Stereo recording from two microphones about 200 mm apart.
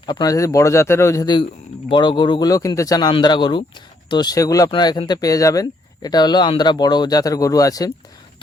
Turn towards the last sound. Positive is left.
turn(degrees=15)  # may be behind; listen again after turning